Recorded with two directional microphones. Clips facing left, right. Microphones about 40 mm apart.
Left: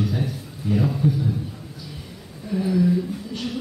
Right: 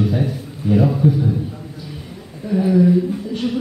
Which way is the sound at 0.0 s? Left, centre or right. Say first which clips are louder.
Right 6 dB; right.